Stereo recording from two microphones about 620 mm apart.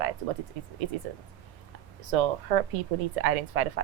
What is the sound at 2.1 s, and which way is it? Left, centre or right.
A woman's voice, right.